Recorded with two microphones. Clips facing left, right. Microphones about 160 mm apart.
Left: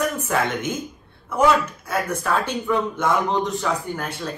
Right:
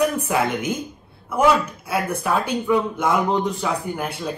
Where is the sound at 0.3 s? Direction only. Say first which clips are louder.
Right 1 dB; 10° right (ahead or behind).